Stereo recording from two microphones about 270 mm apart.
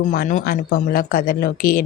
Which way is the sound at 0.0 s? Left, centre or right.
Left.